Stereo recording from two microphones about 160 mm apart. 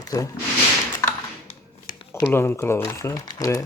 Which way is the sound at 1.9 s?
30° left (ahead or behind).